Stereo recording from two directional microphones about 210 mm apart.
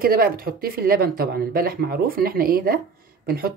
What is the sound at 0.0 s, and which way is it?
Speech, 45° right (ahead or behind).